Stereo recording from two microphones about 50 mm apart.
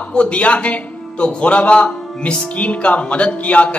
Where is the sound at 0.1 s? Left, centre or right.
Left.